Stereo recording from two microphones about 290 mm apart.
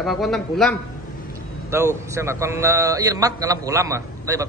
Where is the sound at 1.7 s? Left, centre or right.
Centre.